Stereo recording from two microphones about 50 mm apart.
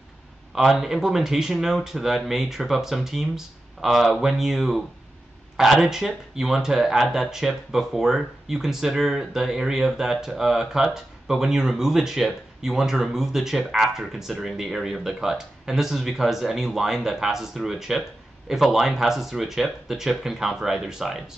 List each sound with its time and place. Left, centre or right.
0.7 s speech: centre